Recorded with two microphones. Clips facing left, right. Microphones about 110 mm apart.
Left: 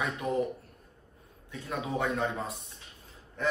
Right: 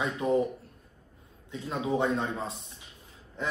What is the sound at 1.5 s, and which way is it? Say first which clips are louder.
Speech: right 4 dB; 25° right (ahead or behind).